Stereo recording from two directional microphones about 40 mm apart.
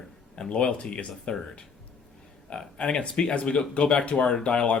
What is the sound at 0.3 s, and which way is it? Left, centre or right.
Speech, left.